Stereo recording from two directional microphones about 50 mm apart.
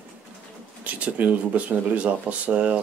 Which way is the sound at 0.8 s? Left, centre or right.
Right.